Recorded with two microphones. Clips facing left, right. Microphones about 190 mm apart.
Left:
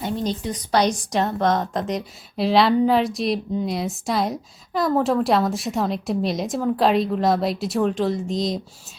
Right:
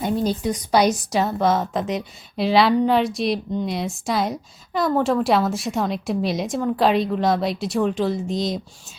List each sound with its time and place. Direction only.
0.0 s a woman's voice: 10° right (ahead or behind)